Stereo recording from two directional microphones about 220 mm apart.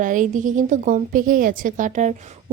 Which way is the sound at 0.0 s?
35° right (ahead or behind).